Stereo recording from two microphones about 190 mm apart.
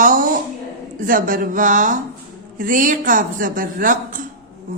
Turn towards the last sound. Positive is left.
turn(degrees=-45)  # may be behind; listen again after turning